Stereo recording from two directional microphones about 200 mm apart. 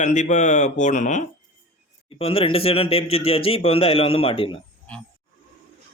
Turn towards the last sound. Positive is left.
turn(degrees=25)  # may be behind; listen again after turning